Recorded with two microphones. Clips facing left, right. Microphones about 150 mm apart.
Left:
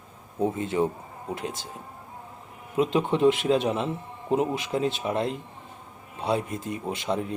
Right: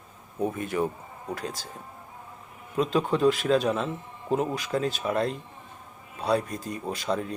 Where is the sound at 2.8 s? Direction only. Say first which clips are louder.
Left 1 dB; 20° left (ahead or behind).